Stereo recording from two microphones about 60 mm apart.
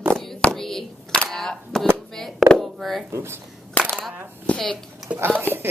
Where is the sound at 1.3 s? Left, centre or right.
Centre.